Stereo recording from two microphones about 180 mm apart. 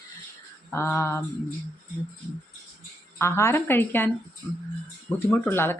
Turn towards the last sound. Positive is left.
turn(degrees=10)  # may be behind; listen again after turning